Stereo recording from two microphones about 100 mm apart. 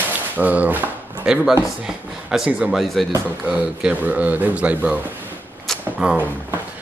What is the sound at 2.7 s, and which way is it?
Speech, centre (ahead or behind).